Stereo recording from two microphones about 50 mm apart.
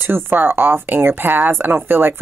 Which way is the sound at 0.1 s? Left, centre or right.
Right.